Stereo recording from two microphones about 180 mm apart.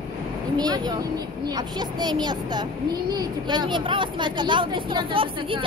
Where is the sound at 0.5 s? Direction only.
20° right (ahead or behind).